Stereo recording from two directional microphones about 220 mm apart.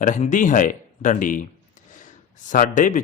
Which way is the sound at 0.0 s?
35° left (ahead or behind).